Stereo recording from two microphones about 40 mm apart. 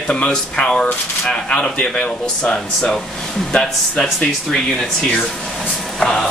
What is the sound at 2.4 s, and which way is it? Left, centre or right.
Speech, left.